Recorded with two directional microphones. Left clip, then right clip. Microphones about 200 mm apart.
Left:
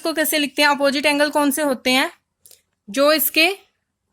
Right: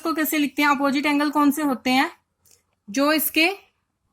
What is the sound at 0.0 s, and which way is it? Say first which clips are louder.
A woman's voice: left 3 dB; 45° left (ahead or behind).